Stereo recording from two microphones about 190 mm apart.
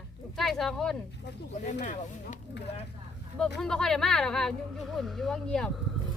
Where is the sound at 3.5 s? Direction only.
5° left (ahead or behind).